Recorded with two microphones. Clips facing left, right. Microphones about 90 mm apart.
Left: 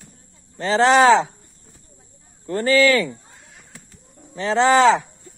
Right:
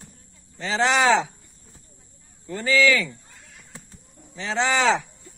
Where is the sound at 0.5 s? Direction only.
45° left (ahead or behind).